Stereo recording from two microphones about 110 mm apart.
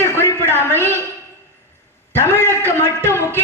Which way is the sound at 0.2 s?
25° left (ahead or behind).